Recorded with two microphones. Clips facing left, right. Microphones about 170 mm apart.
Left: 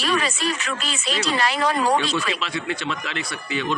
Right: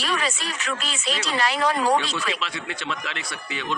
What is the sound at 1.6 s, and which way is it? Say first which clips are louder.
Speech: even; 30° left (ahead or behind).